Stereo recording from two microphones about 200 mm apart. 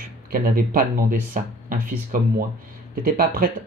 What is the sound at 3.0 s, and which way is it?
Speech, 45° right (ahead or behind).